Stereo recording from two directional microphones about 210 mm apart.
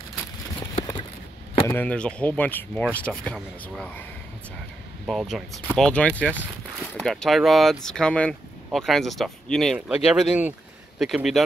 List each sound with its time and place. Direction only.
0.7 s a sound: 20° left (ahead or behind)
1.7 s speech: 5° left (ahead or behind)
5.0 s speech: centre (ahead or behind)